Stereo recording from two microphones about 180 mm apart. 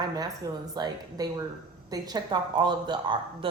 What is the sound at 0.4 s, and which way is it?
Speech, 20° right (ahead or behind).